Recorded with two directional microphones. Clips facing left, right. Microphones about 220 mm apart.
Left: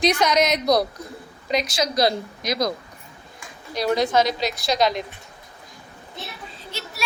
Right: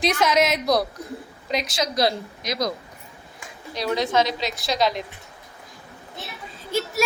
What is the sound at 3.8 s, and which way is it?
Speech, 45° left (ahead or behind).